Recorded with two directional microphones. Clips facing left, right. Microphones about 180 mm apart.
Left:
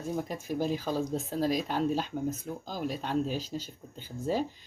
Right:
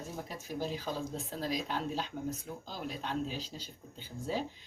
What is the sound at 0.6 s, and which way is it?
Speech, 50° left (ahead or behind).